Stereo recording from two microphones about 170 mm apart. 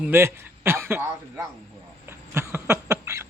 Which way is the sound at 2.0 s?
15° right (ahead or behind).